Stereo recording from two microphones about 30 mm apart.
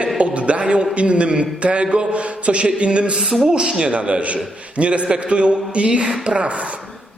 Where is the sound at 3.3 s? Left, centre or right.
Right.